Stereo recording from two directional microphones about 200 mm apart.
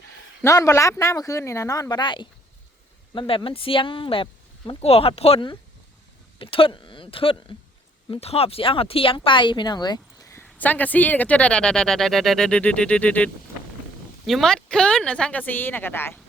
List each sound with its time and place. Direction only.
0.4 s speech: 15° left (ahead or behind)